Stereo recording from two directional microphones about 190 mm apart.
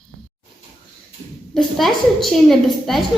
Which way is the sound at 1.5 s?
Centre (ahead or behind).